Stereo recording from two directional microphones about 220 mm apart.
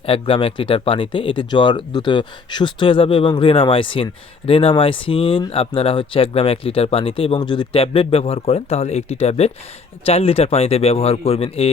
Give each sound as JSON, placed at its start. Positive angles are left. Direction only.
{"t": 0.0, "sound": "speech", "side_deg": 25}